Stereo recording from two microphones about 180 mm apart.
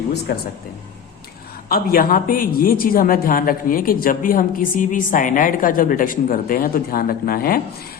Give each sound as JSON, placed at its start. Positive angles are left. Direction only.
{"t": 1.7, "sound": "speech", "side_deg": 55}